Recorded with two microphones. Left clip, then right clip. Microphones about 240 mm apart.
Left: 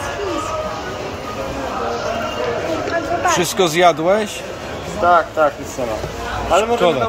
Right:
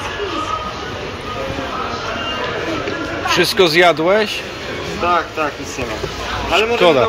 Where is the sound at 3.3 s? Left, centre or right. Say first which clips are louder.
Right 5 dB; centre.